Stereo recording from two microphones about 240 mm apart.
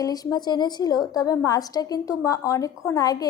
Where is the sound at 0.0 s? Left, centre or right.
Centre.